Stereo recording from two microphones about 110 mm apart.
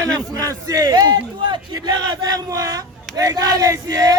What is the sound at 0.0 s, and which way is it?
A man's voice, 30° right (ahead or behind).